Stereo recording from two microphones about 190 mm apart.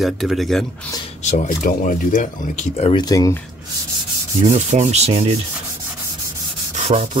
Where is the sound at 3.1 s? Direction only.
20° left (ahead or behind).